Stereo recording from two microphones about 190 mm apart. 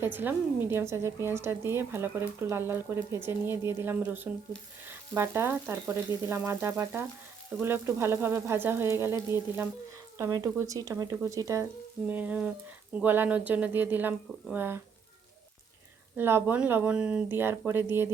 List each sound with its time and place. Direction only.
0.0 s a woman's voice: 10° right (ahead or behind)
4.9 s frying: 10° right (ahead or behind)
5.9 s a woman's voice: 15° right (ahead or behind)
16.1 s a woman's voice: 10° right (ahead or behind)